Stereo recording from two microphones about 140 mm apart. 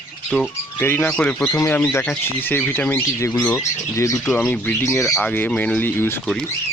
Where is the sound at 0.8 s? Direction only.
15° left (ahead or behind).